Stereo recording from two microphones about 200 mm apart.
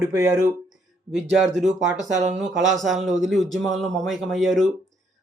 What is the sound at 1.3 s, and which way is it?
Speech, centre (ahead or behind).